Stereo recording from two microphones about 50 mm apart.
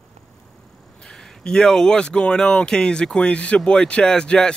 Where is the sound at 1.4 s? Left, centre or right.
Centre.